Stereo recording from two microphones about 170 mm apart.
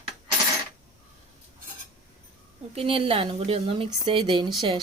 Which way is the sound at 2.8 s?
35° right (ahead or behind).